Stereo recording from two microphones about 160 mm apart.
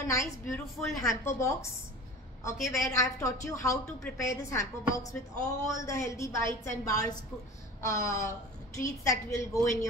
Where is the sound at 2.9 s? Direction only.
20° left (ahead or behind).